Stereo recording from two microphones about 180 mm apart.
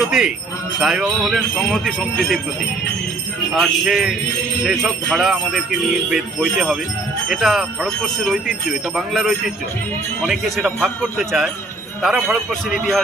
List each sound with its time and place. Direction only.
0.1 s speech: 5° right (ahead or behind)
3.5 s speech: centre (ahead or behind)